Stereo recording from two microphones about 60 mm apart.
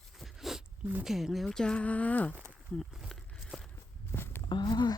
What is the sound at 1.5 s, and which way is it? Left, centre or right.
Speech, centre.